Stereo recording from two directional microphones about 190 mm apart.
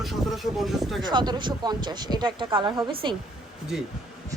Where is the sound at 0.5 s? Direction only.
Centre (ahead or behind).